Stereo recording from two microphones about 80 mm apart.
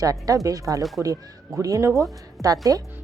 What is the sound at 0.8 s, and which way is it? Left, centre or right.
Speech, centre.